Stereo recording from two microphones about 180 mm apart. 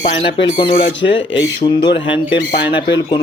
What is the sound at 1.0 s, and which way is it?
Speech, 90° left.